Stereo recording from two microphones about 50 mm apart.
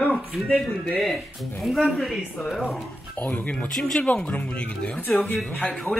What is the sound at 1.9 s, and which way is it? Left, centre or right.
Speech, centre.